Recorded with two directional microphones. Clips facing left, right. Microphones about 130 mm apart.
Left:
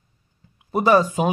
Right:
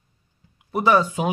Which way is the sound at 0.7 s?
40° left (ahead or behind).